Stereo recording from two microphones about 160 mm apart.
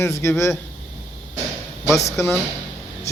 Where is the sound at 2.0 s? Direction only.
20° left (ahead or behind).